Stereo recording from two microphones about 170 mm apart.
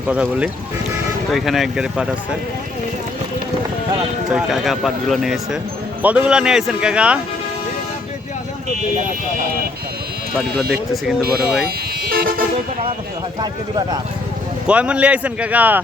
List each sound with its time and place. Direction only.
0.1 s speech: 5° right (ahead or behind)
4.3 s speech: centre (ahead or behind)
10.3 s speech: centre (ahead or behind)
12.0 s vehicle: 60° right (ahead or behind)
13.4 s speech: 25° right (ahead or behind)
14.7 s speech: 5° right (ahead or behind)